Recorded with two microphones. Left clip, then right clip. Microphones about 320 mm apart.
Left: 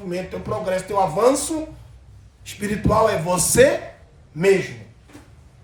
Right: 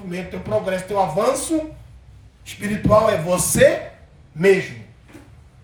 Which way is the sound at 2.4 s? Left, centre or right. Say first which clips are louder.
Right 1 dB; centre.